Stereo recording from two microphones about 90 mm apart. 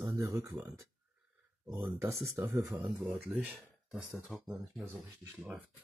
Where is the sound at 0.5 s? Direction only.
45° right (ahead or behind).